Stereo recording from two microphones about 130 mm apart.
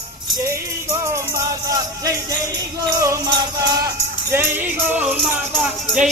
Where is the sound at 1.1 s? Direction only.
25° right (ahead or behind).